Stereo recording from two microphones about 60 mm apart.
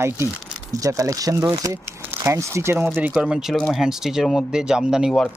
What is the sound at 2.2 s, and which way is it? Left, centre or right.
Speech, right.